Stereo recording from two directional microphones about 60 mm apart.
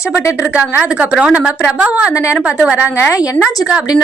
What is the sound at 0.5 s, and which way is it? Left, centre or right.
A woman's voice, right.